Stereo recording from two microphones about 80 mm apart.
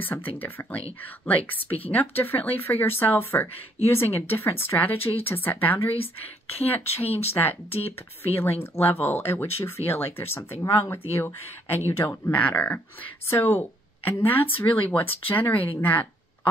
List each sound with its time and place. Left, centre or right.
0.0 s speech: left
12.4 s speech: centre